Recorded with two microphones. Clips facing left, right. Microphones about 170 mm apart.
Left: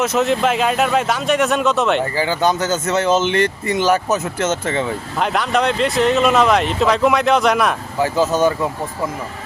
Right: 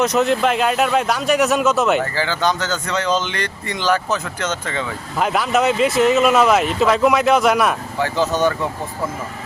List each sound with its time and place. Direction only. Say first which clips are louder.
0.0 s speech: even; centre (ahead or behind)
2.1 s speech: left 3 dB; 15° left (ahead or behind)
5.2 s speech: right 1 dB; 5° right (ahead or behind)